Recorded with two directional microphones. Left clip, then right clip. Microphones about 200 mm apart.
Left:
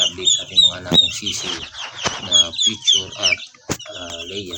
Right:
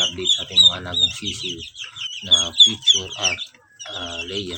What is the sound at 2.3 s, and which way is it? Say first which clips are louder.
Speech: right 2 dB; centre (ahead or behind).